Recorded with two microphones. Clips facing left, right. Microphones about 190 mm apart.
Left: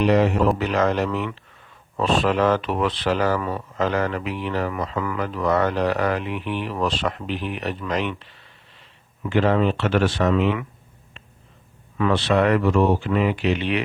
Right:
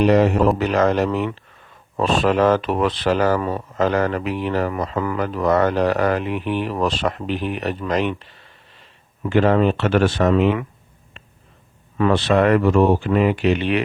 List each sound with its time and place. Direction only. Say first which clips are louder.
0.0 s speech: right 3 dB; 45° right (ahead or behind)
9.2 s speech: right 3 dB; 50° right (ahead or behind)
11.9 s speech: right 3 dB; 45° right (ahead or behind)